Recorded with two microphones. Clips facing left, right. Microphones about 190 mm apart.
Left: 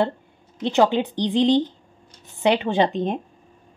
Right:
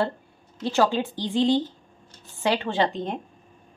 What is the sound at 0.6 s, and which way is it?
Speech, 20° left (ahead or behind).